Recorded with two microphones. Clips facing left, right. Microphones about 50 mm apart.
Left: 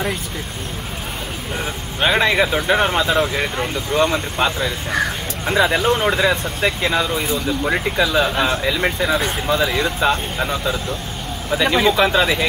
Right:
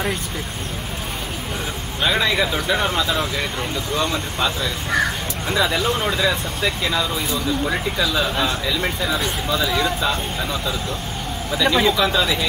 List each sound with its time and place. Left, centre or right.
2.0 s speech: left
11.6 s speech: centre
11.9 s speech: left